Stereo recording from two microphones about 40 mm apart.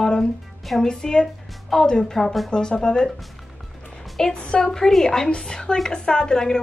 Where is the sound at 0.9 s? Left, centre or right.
Centre.